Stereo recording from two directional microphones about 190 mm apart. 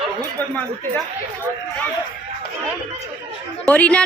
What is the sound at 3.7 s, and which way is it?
Speech, 5° left (ahead or behind).